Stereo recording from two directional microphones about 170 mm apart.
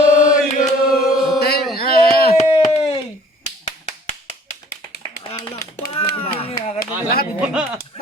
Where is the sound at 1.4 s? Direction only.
65° left (ahead or behind).